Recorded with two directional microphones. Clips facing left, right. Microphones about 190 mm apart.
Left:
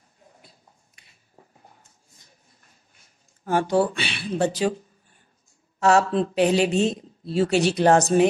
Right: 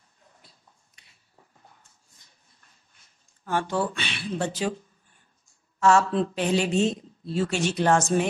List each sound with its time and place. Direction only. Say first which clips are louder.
3.4 s a woman's voice: left 6 dB; 40° left (ahead or behind)
5.8 s a woman's voice: left 2 dB; 40° left (ahead or behind)